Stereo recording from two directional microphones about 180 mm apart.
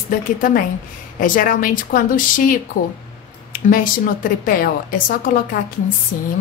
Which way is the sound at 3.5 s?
50° left (ahead or behind).